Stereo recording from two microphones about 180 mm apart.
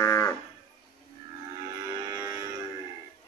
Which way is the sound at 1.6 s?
20° right (ahead or behind).